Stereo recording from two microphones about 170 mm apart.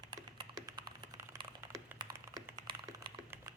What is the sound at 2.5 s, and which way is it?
Typing, 20° right (ahead or behind).